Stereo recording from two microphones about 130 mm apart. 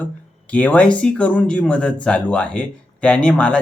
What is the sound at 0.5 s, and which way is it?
Speech, 10° left (ahead or behind).